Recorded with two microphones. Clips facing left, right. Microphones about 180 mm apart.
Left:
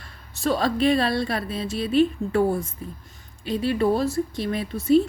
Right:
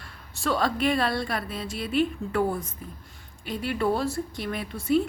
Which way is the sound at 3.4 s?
25° left (ahead or behind).